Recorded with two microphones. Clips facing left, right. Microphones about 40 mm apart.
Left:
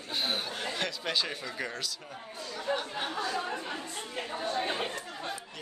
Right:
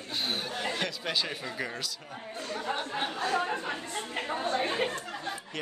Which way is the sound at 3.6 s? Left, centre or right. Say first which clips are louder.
Right 3 dB; right.